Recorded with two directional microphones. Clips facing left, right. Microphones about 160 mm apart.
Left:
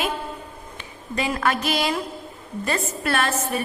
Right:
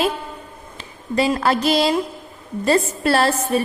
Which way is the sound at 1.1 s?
35° right (ahead or behind).